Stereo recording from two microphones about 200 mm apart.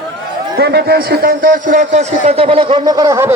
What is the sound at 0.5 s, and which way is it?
A man's voice, 55° right (ahead or behind).